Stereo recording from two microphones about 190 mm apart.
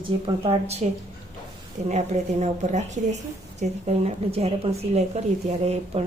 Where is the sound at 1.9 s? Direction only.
35° right (ahead or behind).